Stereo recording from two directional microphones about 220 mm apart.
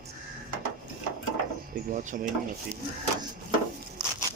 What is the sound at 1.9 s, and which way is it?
Speech, 35° right (ahead or behind).